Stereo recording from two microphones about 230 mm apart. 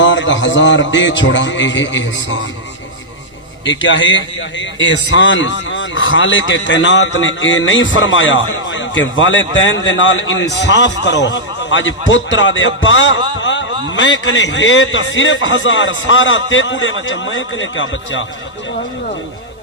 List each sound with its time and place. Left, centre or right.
0.0 s a man's voice: left
3.7 s a man's voice: left
13.4 s a sound: left
13.8 s a man's voice: left